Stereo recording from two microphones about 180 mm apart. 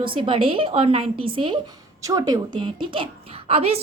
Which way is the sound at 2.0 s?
20° right (ahead or behind).